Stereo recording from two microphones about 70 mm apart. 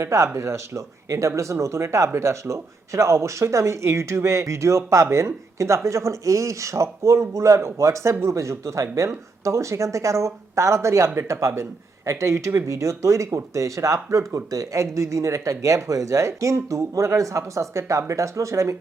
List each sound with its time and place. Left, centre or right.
0.0 s speech: right